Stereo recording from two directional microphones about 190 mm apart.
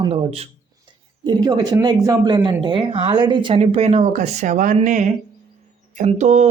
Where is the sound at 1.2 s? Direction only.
20° right (ahead or behind).